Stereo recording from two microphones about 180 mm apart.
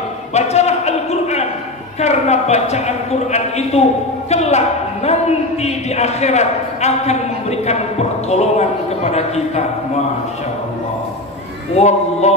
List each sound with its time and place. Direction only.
0.3 s a sound: 40° left (ahead or behind)
2.0 s a woman's voice: 40° left (ahead or behind)
11.7 s a woman's voice: 40° left (ahead or behind)